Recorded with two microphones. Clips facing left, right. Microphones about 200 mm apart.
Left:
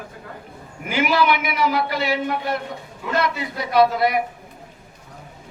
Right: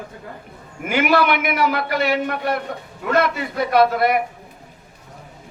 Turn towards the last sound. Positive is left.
turn(degrees=-55)  # may be behind; listen again after turning